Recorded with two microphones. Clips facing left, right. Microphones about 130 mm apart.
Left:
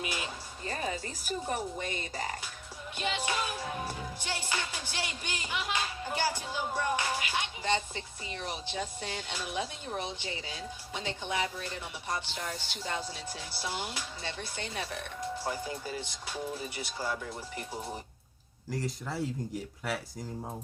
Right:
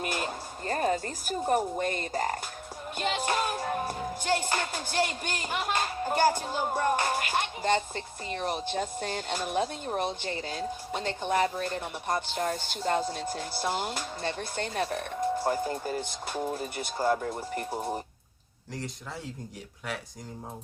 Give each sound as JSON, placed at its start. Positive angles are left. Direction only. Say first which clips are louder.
{"t": 0.0, "sound": "a woman's voice", "louder": "right 5 dB", "side_deg": -50}
{"t": 3.0, "sound": "music", "louder": "right 4 dB", "side_deg": -50}
{"t": 18.7, "sound": "speech", "louder": "left 3 dB", "side_deg": 0}